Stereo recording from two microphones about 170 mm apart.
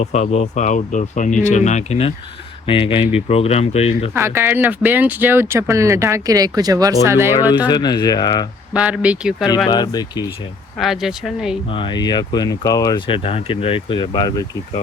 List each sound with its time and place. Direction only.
0.0 s speech: 40° left (ahead or behind)
4.1 s speech: 15° right (ahead or behind)
7.7 s speech: 25° left (ahead or behind)
8.7 s speech: 5° right (ahead or behind)
9.6 s speech: 25° left (ahead or behind)
10.8 s speech: centre (ahead or behind)
11.7 s speech: 30° left (ahead or behind)